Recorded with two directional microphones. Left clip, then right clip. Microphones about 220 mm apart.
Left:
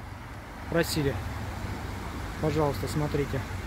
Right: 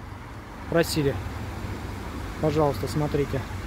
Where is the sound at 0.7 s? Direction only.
10° right (ahead or behind).